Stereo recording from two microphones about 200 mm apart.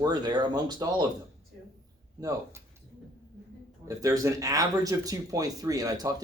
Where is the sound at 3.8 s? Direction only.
15° right (ahead or behind).